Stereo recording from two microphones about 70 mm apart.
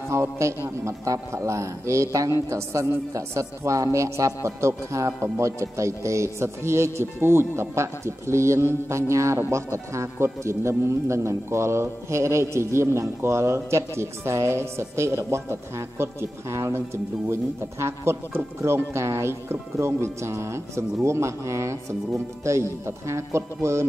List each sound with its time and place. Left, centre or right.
0.1 s a man's voice: right